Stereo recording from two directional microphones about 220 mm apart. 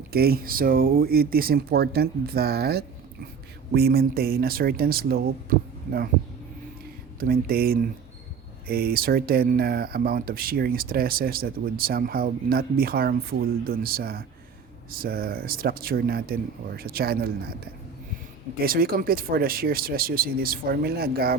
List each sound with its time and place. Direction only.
0.1 s speech: 45° right (ahead or behind)
7.2 s speech: 40° right (ahead or behind)
18.6 s speech: 40° right (ahead or behind)